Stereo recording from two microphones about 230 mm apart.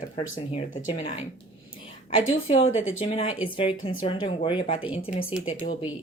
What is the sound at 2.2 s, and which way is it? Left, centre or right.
Speech, left.